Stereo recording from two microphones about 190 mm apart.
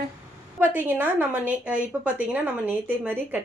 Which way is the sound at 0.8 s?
10° right (ahead or behind).